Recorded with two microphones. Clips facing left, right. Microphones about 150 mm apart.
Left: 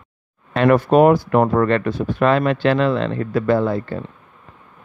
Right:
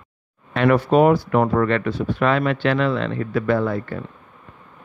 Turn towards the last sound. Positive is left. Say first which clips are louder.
# left 3 dB
turn(degrees=30)  # may be behind; listen again after turning